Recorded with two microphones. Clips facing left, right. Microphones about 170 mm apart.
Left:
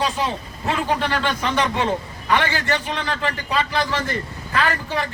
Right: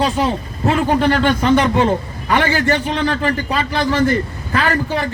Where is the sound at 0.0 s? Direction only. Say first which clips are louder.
Right 6 dB; 50° right (ahead or behind).